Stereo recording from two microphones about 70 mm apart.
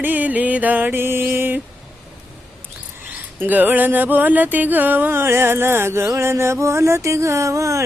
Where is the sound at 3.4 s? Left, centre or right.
Right.